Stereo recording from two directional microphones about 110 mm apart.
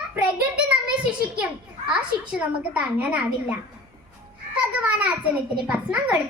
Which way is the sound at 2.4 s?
10° right (ahead or behind).